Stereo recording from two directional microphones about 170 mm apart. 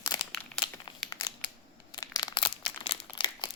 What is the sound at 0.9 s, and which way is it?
Crumpling, 25° left (ahead or behind).